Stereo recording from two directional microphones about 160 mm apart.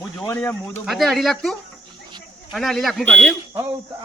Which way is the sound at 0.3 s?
15° left (ahead or behind).